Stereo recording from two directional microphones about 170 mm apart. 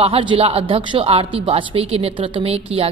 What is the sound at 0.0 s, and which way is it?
Speech, 30° right (ahead or behind).